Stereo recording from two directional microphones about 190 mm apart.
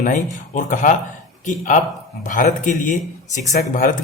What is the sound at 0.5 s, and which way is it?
Speech, 45° left (ahead or behind).